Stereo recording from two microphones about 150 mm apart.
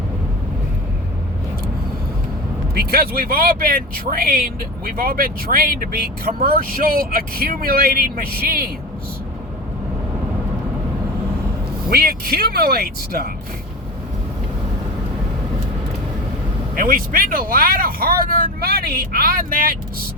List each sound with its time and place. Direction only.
2.7 s speech: 85° right
11.9 s speech: 90° right
16.7 s speech: 70° right (ahead or behind)